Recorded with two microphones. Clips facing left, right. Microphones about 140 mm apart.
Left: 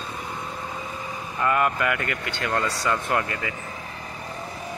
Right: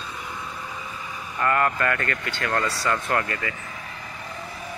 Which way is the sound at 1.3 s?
15° left (ahead or behind).